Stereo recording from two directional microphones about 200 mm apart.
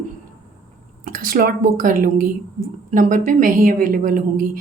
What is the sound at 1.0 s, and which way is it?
A woman's voice, 45° right (ahead or behind).